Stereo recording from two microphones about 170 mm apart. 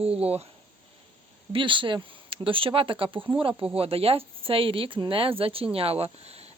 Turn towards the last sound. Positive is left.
turn(degrees=-40)  # may be behind; listen again after turning